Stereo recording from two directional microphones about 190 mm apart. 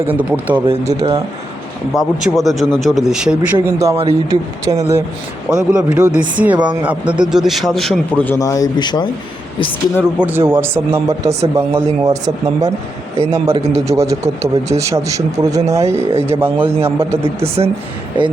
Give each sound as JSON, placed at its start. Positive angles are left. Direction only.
{"t": 0.1, "sound": "speech", "side_deg": -10}
{"t": 0.9, "sound": "speech", "side_deg": -30}
{"t": 1.9, "sound": "a man's voice", "side_deg": 0}
{"t": 5.5, "sound": "a man's voice", "side_deg": -5}
{"t": 10.0, "sound": "speech", "side_deg": -10}
{"t": 17.2, "sound": "speech", "side_deg": -30}